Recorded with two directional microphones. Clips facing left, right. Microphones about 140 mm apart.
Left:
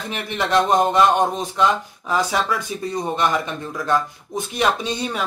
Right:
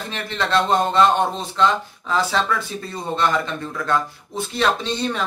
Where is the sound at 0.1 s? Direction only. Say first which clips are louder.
Left 1 dB; 15° left (ahead or behind).